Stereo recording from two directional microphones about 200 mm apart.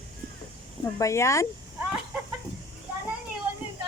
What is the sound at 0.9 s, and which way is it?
Speech, 15° left (ahead or behind).